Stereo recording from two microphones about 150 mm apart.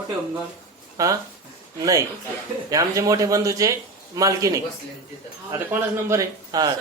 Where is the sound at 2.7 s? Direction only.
20° right (ahead or behind).